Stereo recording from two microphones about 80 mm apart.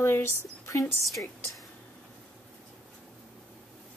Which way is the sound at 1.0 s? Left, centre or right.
Centre.